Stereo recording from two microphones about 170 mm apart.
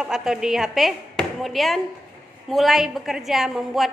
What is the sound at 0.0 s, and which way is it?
A woman's voice, 5° right (ahead or behind).